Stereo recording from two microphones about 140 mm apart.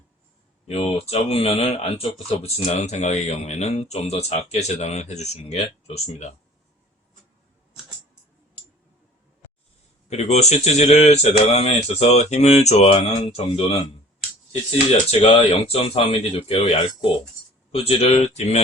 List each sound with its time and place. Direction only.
0.7 s speech: 45° left (ahead or behind)
10.1 s speech: 50° left (ahead or behind)
15.2 s speech: 45° left (ahead or behind)